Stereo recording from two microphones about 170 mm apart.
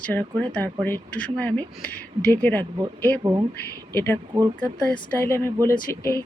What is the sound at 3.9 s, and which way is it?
Speech, 15° left (ahead or behind).